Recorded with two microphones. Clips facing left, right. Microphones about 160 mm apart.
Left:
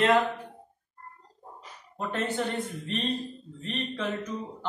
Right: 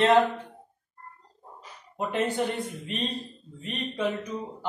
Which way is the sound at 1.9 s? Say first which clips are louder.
Right 3 dB; 15° right (ahead or behind).